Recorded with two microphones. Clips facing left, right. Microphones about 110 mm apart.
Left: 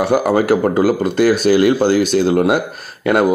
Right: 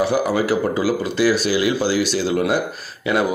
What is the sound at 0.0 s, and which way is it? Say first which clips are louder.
A man's voice: left 4 dB; 55° left (ahead or behind).